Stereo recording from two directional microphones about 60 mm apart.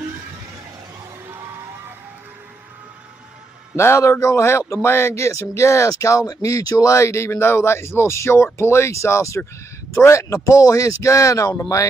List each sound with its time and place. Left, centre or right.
3.7 s speech: left